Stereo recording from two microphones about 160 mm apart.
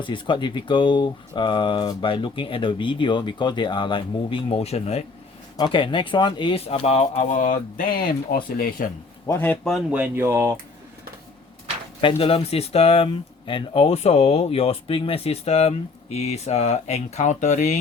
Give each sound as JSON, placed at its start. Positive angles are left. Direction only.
{"t": 0.0, "sound": "a man's voice", "side_deg": 30}
{"t": 9.2, "sound": "speech", "side_deg": 15}
{"t": 9.6, "sound": "speech", "side_deg": -5}
{"t": 11.9, "sound": "speech", "side_deg": 35}